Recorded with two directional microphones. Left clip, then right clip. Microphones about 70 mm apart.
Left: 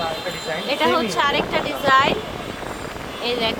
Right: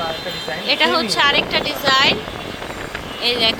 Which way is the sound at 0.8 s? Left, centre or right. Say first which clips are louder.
Right 2 dB; right.